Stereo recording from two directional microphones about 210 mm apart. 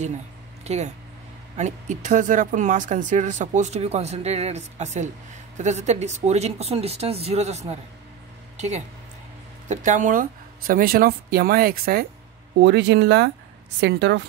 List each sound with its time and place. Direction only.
0.7 s speech: 30° right (ahead or behind)
12.6 s a woman's voice: 55° right (ahead or behind)